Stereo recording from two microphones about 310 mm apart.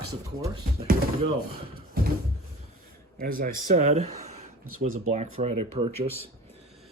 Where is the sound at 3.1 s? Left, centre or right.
Right.